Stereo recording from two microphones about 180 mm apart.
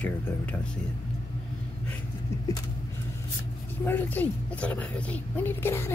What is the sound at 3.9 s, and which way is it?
A woman's voice, 10° left (ahead or behind).